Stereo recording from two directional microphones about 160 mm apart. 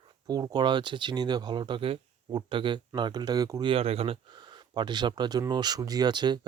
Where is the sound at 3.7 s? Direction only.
35° right (ahead or behind).